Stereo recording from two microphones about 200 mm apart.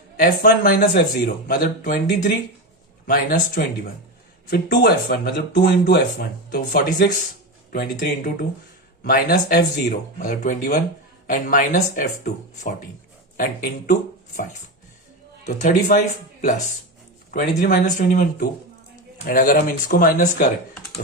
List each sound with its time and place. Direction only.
0.2 s speech: 45° left (ahead or behind)
15.4 s speech: 35° left (ahead or behind)